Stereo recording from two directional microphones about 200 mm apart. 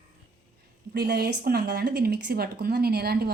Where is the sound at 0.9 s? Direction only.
50° right (ahead or behind).